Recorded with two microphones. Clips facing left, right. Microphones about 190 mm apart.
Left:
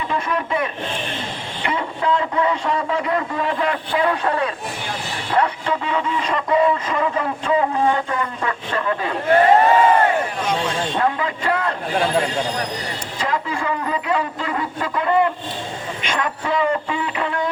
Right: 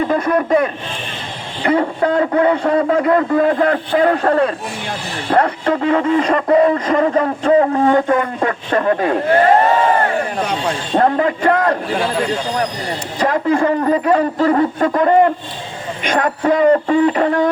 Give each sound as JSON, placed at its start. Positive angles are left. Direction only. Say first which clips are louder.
{"t": 0.0, "sound": "a man's voice", "louder": "right 8 dB", "side_deg": -45}
{"t": 1.7, "sound": "speech", "louder": "right 6 dB", "side_deg": -55}
{"t": 10.9, "sound": "a man's voice", "louder": "right 12 dB", "side_deg": -45}
{"t": 13.1, "sound": "speech", "louder": "right 9 dB", "side_deg": -50}